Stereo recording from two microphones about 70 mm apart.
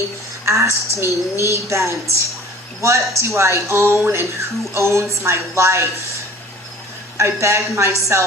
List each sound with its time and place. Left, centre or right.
0.4 s a woman's voice: right
7.2 s a woman's voice: right